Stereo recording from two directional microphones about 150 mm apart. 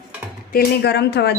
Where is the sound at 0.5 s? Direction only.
90° left.